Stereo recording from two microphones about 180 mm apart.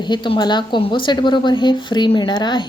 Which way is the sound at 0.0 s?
25° left (ahead or behind).